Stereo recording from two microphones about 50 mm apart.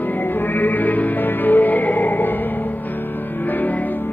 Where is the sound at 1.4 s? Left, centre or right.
Left.